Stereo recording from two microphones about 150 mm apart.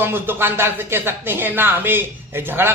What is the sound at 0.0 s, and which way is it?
Speech, 15° right (ahead or behind).